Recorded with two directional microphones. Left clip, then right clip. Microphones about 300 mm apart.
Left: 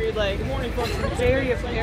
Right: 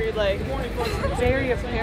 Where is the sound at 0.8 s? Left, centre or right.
Centre.